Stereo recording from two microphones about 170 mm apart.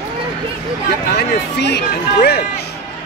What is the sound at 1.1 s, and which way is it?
Speech, 75° left (ahead or behind).